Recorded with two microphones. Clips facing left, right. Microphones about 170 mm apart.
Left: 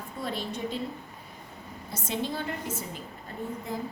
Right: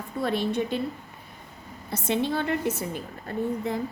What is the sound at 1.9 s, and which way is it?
A woman's voice, 65° right (ahead or behind).